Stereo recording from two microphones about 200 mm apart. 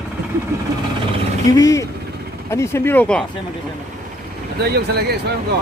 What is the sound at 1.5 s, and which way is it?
Speech, 15° left (ahead or behind).